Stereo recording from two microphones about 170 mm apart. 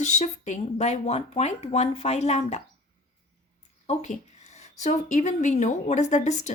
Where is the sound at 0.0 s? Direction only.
45° left (ahead or behind).